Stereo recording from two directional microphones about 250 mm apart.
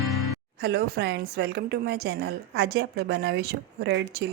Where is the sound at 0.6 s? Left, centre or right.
Right.